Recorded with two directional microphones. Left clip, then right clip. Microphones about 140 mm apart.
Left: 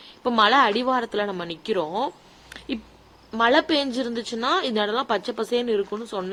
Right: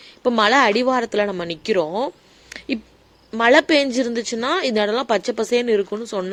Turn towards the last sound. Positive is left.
turn(degrees=-45)  # may be behind; listen again after turning